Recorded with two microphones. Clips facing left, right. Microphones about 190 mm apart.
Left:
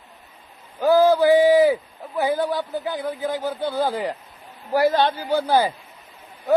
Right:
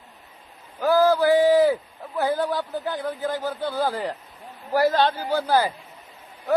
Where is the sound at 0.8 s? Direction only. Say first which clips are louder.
Left 3 dB; 20° left (ahead or behind).